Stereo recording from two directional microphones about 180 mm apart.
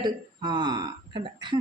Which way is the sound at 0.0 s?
25° right (ahead or behind).